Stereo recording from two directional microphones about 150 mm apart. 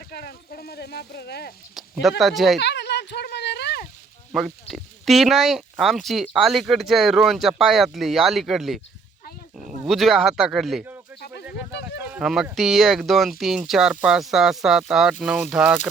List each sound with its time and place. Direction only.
0.1 s speech: 90° left
1.7 s speech: centre (ahead or behind)
3.0 s a sound: 90° left
4.3 s speech: centre (ahead or behind)
9.8 s speech: centre (ahead or behind)
11.9 s a sound: 10° right (ahead or behind)
12.5 s speech: centre (ahead or behind)